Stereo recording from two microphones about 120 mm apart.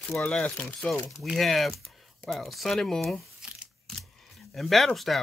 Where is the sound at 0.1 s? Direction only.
5° left (ahead or behind).